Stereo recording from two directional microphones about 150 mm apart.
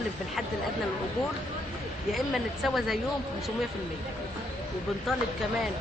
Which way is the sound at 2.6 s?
Centre (ahead or behind).